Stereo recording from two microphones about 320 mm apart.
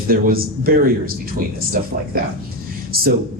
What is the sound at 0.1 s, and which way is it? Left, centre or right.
Speech, right.